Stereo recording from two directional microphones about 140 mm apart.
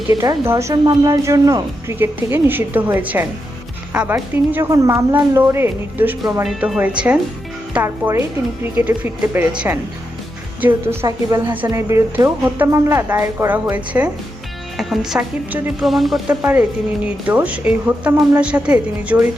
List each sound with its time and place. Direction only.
0.2 s a woman's voice: 20° right (ahead or behind)
6.4 s a woman's voice: centre (ahead or behind)
10.6 s a woman's voice: 15° right (ahead or behind)
15.5 s a woman's voice: 10° right (ahead or behind)
15.9 s a woman's voice: centre (ahead or behind)